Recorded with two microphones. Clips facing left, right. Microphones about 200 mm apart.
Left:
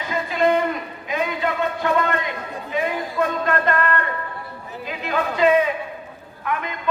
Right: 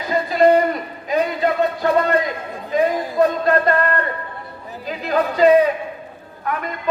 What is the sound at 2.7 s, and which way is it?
A man's voice, 35° right (ahead or behind).